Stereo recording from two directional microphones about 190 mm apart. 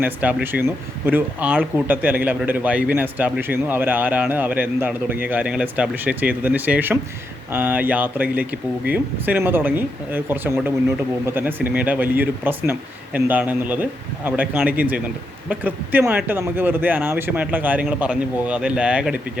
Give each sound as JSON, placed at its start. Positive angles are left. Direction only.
{"t": 0.0, "sound": "speech", "side_deg": -10}